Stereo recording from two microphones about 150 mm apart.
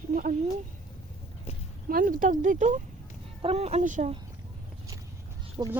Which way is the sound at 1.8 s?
70° right (ahead or behind).